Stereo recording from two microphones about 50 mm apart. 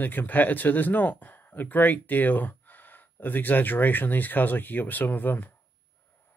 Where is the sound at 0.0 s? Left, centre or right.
Left.